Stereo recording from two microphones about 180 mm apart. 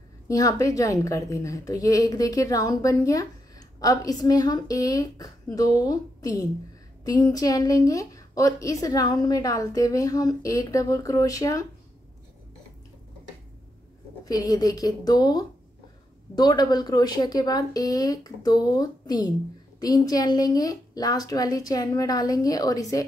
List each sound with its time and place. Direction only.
0.3 s a woman's voice: 20° left (ahead or behind)
14.2 s a woman's voice: 20° left (ahead or behind)